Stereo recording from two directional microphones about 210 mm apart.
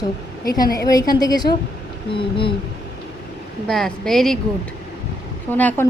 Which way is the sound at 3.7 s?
Centre (ahead or behind).